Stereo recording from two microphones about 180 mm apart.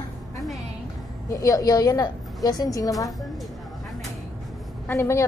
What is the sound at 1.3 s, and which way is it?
A woman's voice, 20° left (ahead or behind).